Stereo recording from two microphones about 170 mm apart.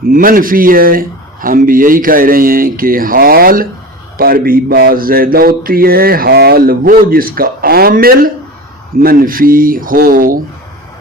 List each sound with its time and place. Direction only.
0.1 s mantra: 55° right (ahead or behind)